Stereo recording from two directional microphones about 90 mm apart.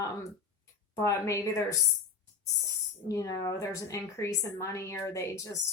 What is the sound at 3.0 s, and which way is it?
Speech, 40° left (ahead or behind).